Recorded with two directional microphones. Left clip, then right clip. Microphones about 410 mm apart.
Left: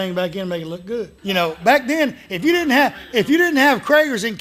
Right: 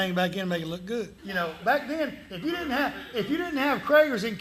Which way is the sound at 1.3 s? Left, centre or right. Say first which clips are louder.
Left 10 dB; left.